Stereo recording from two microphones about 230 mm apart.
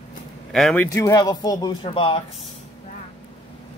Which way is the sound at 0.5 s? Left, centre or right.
Centre.